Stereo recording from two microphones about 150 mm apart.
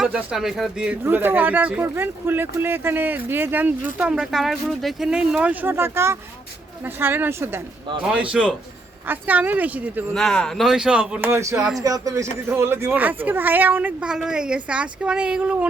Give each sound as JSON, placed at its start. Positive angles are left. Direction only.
{"t": 0.0, "sound": "speech", "side_deg": -5}
{"t": 10.2, "sound": "a man's voice", "side_deg": 5}